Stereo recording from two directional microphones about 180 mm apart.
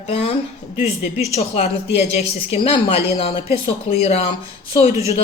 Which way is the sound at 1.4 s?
35° left (ahead or behind).